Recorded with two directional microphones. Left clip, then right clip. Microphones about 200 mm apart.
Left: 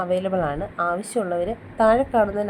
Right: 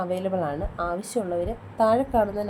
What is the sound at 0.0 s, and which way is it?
A woman's voice, 10° left (ahead or behind).